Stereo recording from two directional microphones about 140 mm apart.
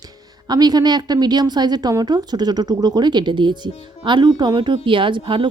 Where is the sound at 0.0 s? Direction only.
30° right (ahead or behind).